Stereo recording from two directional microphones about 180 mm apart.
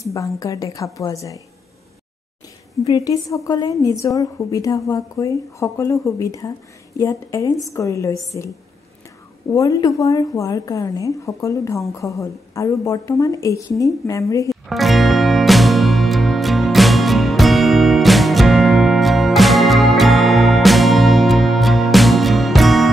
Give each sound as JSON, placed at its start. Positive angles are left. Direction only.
{"t": 0.0, "sound": "a woman's voice", "side_deg": 15}
{"t": 2.8, "sound": "a woman's voice", "side_deg": 20}
{"t": 9.5, "sound": "a woman's voice", "side_deg": 20}
{"t": 14.7, "sound": "music", "side_deg": 0}